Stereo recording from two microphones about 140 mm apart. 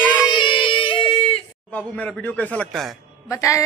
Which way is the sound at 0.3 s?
35° left (ahead or behind).